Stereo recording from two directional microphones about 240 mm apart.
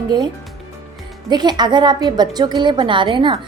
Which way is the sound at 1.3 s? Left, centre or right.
Centre.